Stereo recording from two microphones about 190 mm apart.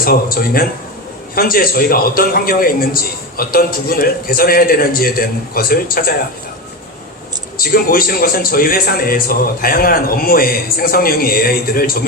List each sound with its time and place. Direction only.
0.0 s a man's voice: 50° left (ahead or behind)
7.6 s a man's voice: 50° left (ahead or behind)